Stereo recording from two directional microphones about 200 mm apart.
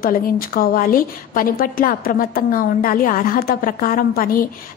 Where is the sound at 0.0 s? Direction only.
45° left (ahead or behind).